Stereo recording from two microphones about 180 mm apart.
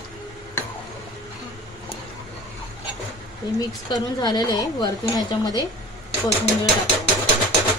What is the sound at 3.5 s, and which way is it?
A woman's voice, 25° left (ahead or behind).